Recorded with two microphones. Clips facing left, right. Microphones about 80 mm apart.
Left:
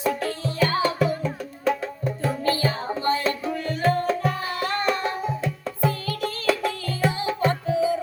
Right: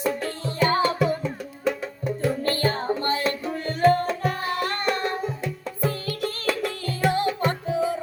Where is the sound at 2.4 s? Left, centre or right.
Right.